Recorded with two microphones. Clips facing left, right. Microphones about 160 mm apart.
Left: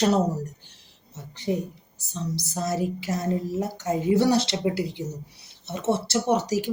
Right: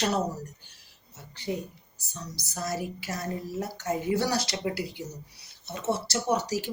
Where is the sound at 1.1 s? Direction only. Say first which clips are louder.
Left 6 dB; 25° left (ahead or behind).